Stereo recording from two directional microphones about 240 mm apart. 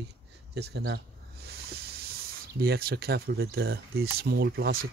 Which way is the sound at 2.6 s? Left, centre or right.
Right.